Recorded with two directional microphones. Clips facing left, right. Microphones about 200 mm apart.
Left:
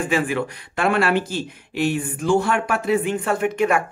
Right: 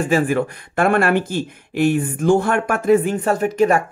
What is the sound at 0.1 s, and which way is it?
Speech, 45° right (ahead or behind).